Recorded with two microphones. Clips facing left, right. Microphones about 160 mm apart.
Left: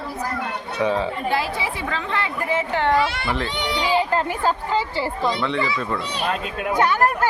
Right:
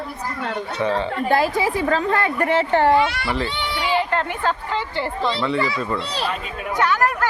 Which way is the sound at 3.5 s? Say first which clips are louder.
Left 1 dB; 20° left (ahead or behind).